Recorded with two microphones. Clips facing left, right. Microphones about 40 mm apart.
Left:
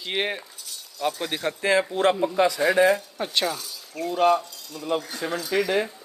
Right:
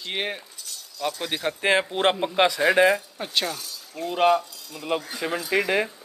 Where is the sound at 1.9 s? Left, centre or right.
Right.